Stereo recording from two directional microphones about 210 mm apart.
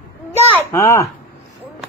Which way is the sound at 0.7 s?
10° left (ahead or behind).